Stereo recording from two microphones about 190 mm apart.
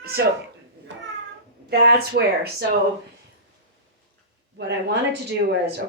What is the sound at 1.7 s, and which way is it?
Speech, 60° right (ahead or behind).